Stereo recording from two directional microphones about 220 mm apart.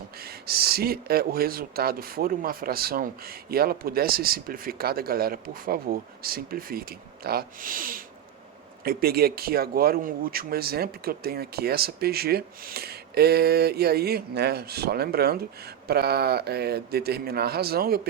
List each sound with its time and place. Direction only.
0.2 s speech: 45° right (ahead or behind)